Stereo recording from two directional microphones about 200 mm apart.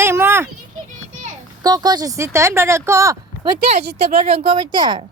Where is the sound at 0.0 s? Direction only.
10° right (ahead or behind).